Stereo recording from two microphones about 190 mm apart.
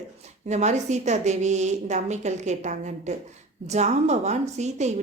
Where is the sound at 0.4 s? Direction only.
35° right (ahead or behind).